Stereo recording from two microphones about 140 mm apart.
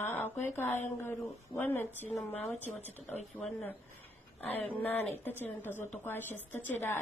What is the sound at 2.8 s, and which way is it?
A woman's voice, 10° left (ahead or behind).